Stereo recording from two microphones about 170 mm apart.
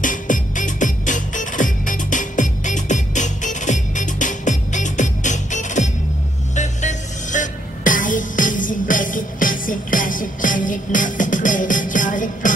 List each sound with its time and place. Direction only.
0.0 s music: 50° left (ahead or behind)